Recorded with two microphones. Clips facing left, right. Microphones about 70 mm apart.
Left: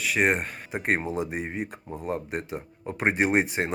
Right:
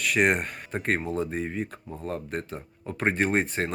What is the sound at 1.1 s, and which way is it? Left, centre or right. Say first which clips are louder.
Speech: right 1 dB; centre.